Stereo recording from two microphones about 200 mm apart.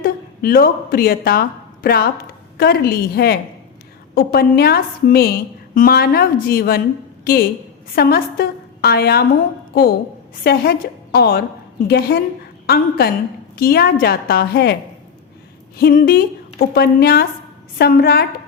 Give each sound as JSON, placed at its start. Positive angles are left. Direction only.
{"t": 0.0, "sound": "a woman's voice", "side_deg": 50}
{"t": 7.9, "sound": "a woman's voice", "side_deg": 50}
{"t": 10.4, "sound": "a woman's voice", "side_deg": 50}
{"t": 15.8, "sound": "a woman's voice", "side_deg": 50}